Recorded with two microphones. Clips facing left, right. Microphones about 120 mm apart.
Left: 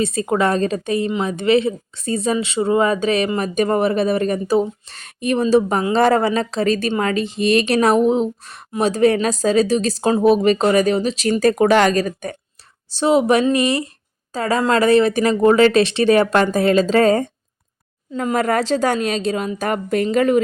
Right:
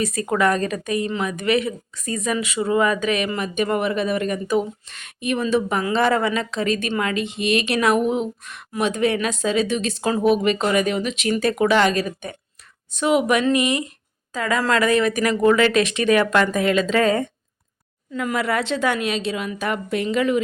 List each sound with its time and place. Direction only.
0.0 s a woman's voice: 25° left (ahead or behind)
18.3 s speech: 40° left (ahead or behind)